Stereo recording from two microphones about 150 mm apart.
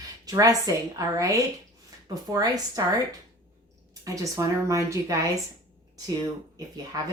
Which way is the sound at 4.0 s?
20° right (ahead or behind).